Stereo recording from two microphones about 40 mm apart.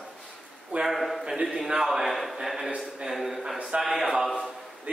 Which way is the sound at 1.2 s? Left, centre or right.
Right.